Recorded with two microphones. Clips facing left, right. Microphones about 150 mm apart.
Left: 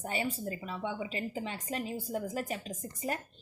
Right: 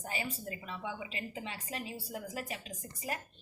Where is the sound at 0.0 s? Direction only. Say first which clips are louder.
Left 5 dB; 35° left (ahead or behind).